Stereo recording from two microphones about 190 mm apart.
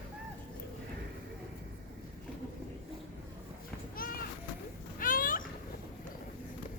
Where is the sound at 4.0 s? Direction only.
50° left (ahead or behind).